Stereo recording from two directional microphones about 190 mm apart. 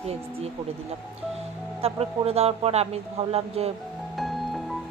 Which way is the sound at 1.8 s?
30° right (ahead or behind).